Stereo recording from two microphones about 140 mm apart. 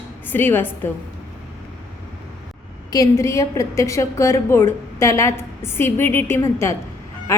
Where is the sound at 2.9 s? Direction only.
25° left (ahead or behind).